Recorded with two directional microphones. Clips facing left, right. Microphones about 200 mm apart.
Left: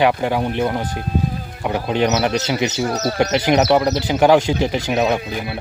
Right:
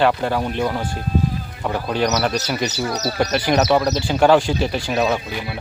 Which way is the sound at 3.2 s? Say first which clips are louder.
Left 2 dB; 20° left (ahead or behind).